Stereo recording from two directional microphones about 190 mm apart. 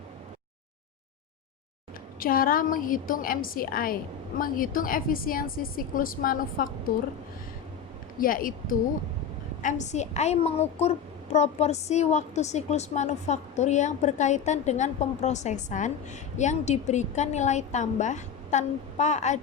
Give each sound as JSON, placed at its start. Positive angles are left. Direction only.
{"t": 2.1, "sound": "a woman's voice", "side_deg": 50}
{"t": 8.2, "sound": "a woman's voice", "side_deg": 45}
{"t": 9.6, "sound": "a woman's voice", "side_deg": 40}